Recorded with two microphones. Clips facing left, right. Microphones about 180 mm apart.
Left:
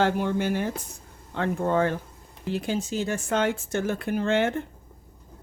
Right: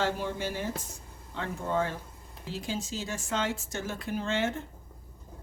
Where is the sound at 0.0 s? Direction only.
60° left (ahead or behind).